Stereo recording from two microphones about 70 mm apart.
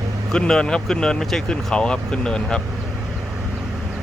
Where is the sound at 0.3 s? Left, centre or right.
Centre.